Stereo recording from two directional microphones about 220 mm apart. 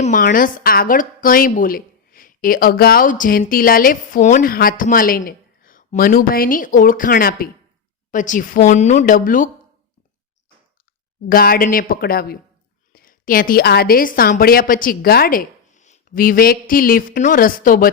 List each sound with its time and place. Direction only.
0.0 s a woman's voice: 35° left (ahead or behind)
11.3 s a woman's voice: 40° left (ahead or behind)